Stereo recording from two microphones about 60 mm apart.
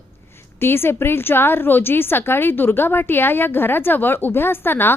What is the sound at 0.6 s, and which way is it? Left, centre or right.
A woman's voice, left.